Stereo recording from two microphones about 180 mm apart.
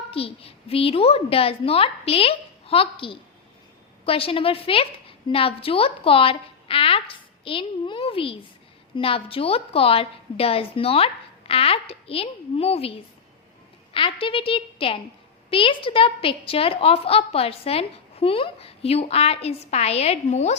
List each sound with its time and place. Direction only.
0.1 s a woman's voice: 30° left (ahead or behind)